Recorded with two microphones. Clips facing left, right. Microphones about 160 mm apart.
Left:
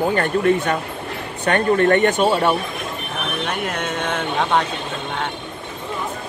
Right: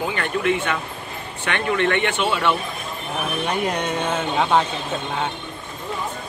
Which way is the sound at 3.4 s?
10° right (ahead or behind).